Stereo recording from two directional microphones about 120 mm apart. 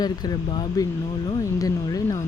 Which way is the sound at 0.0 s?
35° left (ahead or behind).